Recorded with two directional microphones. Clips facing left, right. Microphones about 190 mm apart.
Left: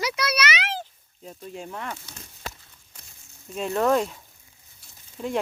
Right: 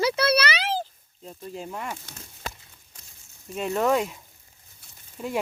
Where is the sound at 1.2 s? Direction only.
Centre (ahead or behind).